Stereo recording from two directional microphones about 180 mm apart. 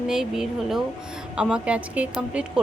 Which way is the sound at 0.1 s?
Centre (ahead or behind).